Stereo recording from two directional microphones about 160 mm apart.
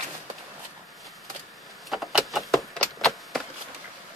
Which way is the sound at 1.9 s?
Centre (ahead or behind).